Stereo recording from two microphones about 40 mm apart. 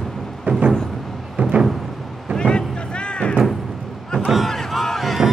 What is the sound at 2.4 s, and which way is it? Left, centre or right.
Music, left.